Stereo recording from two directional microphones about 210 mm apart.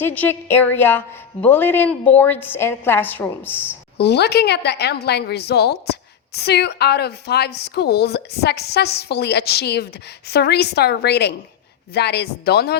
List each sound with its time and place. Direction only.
0.0 s a woman's voice: 10° left (ahead or behind)
3.9 s speech: 50° left (ahead or behind)